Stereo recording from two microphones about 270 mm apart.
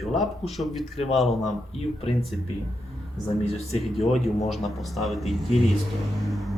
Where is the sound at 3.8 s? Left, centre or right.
Centre.